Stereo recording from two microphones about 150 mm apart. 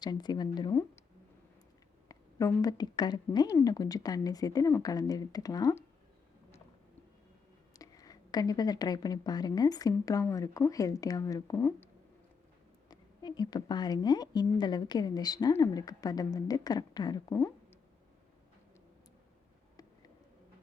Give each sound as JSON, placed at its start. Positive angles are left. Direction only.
{"t": 0.0, "sound": "a woman's voice", "side_deg": 30}
{"t": 2.0, "sound": "a woman's voice", "side_deg": 25}
{"t": 7.8, "sound": "a woman's voice", "side_deg": 25}
{"t": 12.9, "sound": "a woman's voice", "side_deg": 25}